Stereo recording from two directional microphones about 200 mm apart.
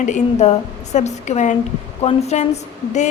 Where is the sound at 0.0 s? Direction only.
35° left (ahead or behind).